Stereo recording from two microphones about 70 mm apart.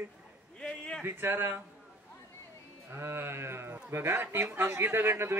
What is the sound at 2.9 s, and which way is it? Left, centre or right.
Speech, right.